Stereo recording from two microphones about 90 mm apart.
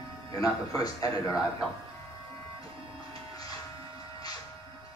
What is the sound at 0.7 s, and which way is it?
Speech, 40° left (ahead or behind).